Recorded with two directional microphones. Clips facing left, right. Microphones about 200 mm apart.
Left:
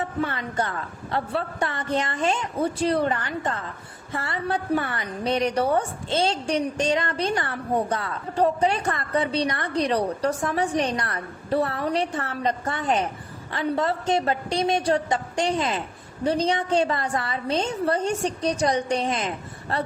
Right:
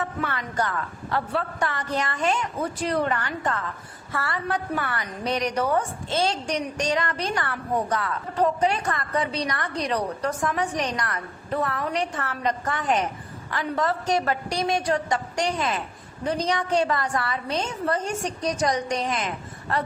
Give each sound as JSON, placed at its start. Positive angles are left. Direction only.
{"t": 0.2, "sound": "a woman's voice", "side_deg": 25}